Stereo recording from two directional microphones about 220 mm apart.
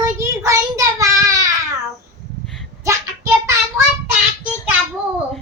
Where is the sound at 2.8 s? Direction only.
15° right (ahead or behind).